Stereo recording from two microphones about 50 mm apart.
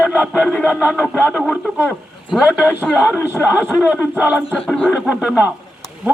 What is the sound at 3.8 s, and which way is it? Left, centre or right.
Speech, right.